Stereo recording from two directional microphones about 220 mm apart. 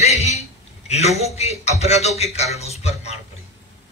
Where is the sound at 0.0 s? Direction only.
30° left (ahead or behind).